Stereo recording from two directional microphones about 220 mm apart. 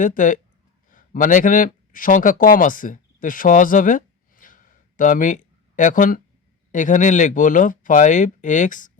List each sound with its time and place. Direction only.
0.0 s speech: 35° left (ahead or behind)